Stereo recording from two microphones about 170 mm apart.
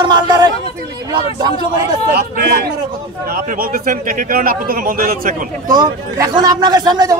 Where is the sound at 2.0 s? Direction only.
65° right (ahead or behind).